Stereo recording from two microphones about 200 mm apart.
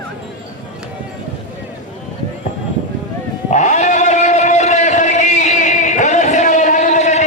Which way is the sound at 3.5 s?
35° left (ahead or behind).